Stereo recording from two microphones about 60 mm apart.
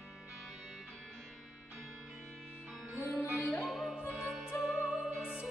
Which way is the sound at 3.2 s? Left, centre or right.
Left.